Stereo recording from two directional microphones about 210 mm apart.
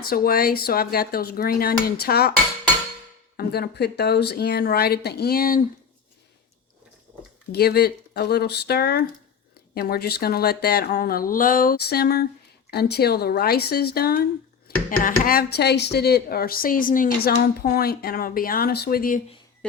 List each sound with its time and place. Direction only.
0.0 s speech: 45° left (ahead or behind)
3.3 s speech: 50° left (ahead or behind)
7.5 s speech: 50° left (ahead or behind)